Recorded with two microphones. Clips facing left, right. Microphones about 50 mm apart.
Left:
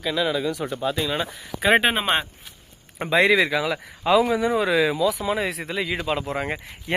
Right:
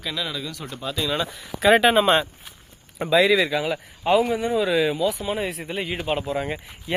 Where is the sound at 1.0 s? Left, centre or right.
Centre.